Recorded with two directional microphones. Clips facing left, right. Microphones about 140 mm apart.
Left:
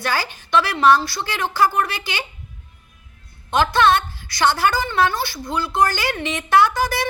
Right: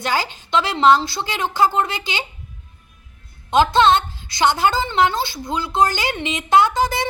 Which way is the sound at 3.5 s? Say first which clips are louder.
Right 2 dB; 20° right (ahead or behind).